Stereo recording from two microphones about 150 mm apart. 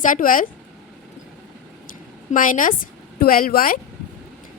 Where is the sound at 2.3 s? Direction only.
60° left (ahead or behind).